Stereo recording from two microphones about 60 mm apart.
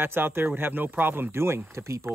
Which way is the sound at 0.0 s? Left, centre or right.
Right.